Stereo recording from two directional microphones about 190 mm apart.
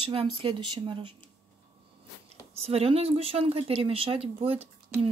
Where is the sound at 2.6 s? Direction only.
30° right (ahead or behind).